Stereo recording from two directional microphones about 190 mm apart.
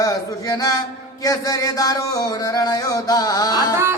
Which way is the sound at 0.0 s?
20° left (ahead or behind).